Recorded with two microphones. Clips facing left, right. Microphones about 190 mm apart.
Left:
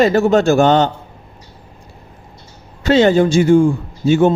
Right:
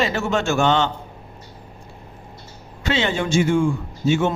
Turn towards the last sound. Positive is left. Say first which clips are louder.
# left 7 dB
turn(degrees=35)  # may be behind; listen again after turning